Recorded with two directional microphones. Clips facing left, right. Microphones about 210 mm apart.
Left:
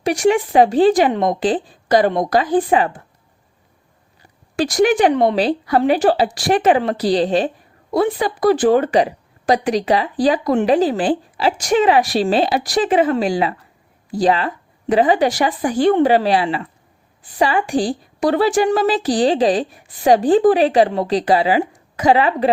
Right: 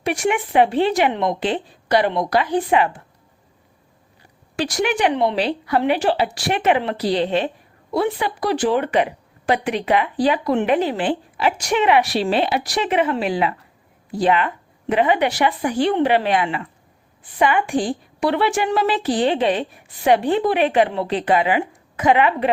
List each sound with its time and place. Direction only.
0.0 s a woman's voice: 40° left (ahead or behind)
4.5 s a woman's voice: 40° left (ahead or behind)